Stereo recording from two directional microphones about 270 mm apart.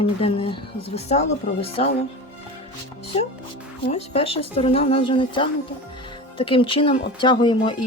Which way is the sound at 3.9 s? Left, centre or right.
Left.